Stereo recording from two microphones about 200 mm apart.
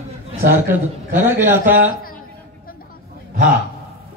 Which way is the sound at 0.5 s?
10° right (ahead or behind).